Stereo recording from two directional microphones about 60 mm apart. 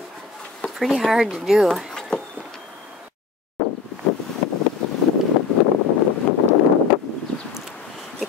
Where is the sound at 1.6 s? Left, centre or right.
Centre.